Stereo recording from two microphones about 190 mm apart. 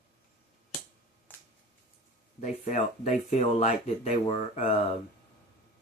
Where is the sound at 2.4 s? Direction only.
40° left (ahead or behind).